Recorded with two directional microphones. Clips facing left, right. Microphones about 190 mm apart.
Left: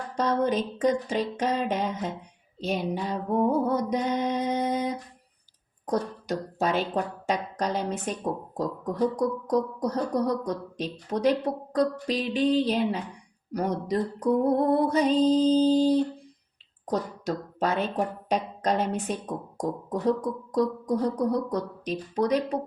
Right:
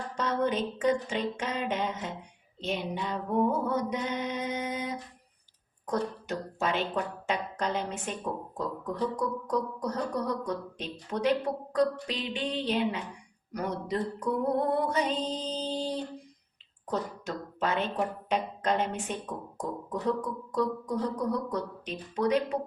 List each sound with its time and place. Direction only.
0.2 s speech: 35° left (ahead or behind)